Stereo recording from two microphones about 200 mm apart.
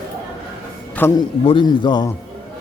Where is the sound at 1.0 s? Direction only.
10° left (ahead or behind).